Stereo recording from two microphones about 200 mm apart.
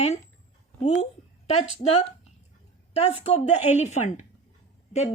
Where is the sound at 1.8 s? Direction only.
30° left (ahead or behind).